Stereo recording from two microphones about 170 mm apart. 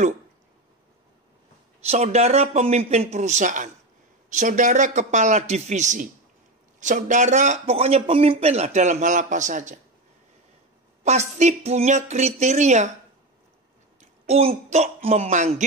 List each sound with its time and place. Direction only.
1.8 s speech: 40° right (ahead or behind)
11.1 s speech: 40° right (ahead or behind)
14.2 s speech: 35° right (ahead or behind)